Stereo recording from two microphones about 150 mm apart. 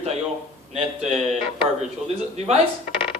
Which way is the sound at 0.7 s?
45° right (ahead or behind).